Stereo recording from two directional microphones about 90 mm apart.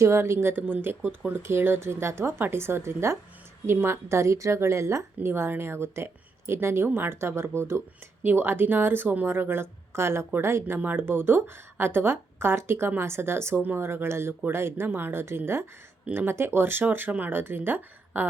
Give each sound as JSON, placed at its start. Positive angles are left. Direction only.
{"t": 0.0, "sound": "a woman's voice", "side_deg": -30}